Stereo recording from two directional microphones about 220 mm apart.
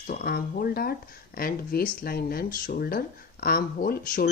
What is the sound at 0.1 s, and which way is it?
Speech, 45° left (ahead or behind).